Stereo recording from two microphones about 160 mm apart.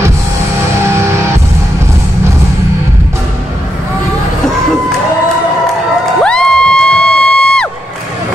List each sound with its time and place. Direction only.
0.8 s music: 15° right (ahead or behind)
6.1 s music: 5° left (ahead or behind)